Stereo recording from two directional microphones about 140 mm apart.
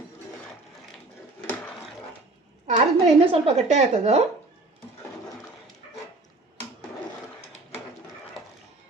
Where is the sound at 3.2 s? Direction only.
45° right (ahead or behind).